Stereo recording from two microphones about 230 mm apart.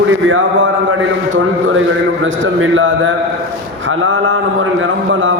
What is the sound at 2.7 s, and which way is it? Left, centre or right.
A man's voice, right.